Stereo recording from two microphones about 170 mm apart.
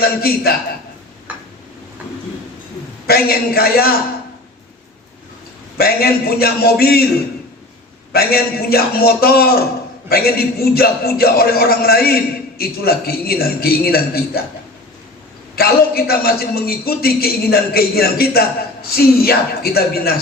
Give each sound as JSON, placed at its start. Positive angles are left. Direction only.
{"t": 0.2, "sound": "a man's voice", "side_deg": 65}
{"t": 3.1, "sound": "a man's voice", "side_deg": 65}
{"t": 5.7, "sound": "a man's voice", "side_deg": 65}
{"t": 8.1, "sound": "a man's voice", "side_deg": 65}
{"t": 15.5, "sound": "a man's voice", "side_deg": 65}